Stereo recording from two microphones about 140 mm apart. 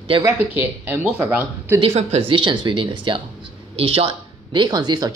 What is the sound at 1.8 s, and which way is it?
Speech, 50° right (ahead or behind).